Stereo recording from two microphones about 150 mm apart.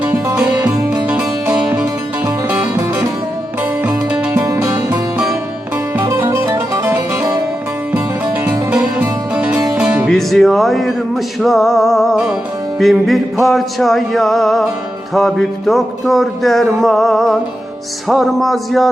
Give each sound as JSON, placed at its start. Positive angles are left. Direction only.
{"t": 0.0, "sound": "music", "side_deg": -10}
{"t": 6.0, "sound": "music", "side_deg": -25}
{"t": 8.7, "sound": "music", "side_deg": -5}